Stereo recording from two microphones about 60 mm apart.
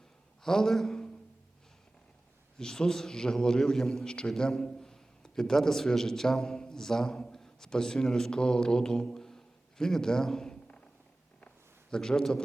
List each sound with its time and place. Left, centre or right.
0.4 s a man's voice: centre
2.6 s a man's voice: centre
11.3 s a sound: centre